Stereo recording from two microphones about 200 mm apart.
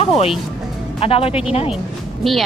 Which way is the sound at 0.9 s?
30° left (ahead or behind).